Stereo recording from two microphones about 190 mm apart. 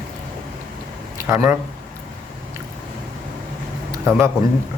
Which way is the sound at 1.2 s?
10° right (ahead or behind).